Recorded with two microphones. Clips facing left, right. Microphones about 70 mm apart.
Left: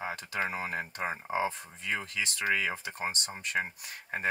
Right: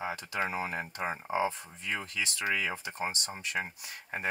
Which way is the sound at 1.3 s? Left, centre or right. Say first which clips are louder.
Right 2 dB; left.